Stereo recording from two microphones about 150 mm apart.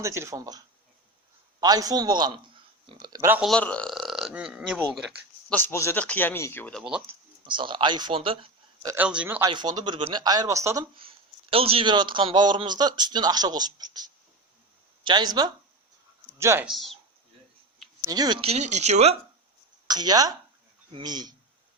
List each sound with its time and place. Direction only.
0.0 s speech: 20° right (ahead or behind)
1.6 s a man's voice: 25° right (ahead or behind)
3.4 s speech: 5° left (ahead or behind)
5.5 s speech: 15° left (ahead or behind)
6.7 s speech: 5° right (ahead or behind)
7.4 s speech: 35° right (ahead or behind)
9.0 s speech: 10° right (ahead or behind)
9.4 s speech: 30° right (ahead or behind)
11.5 s speech: 40° right (ahead or behind); by 16.6 s 20° right (ahead or behind)
16.6 s speech: centre (ahead or behind)
18.0 s speech: 25° right (ahead or behind); by 19.1 s 45° right (ahead or behind)
19.9 s speech: 25° right (ahead or behind)